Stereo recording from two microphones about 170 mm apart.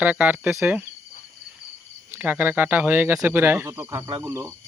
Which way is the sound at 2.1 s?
10° right (ahead or behind).